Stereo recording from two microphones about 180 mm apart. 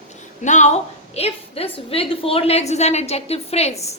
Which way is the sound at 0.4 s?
40° left (ahead or behind).